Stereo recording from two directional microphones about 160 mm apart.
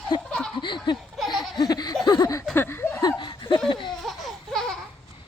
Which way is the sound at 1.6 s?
25° left (ahead or behind).